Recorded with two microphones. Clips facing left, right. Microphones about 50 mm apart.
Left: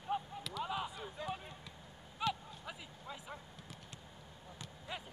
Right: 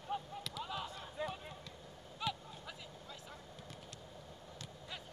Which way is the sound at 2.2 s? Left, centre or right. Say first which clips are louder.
Left 3 dB; centre.